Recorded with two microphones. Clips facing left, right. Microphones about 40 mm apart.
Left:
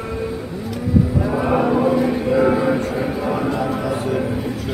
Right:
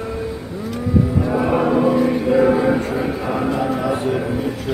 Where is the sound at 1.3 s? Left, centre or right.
Centre.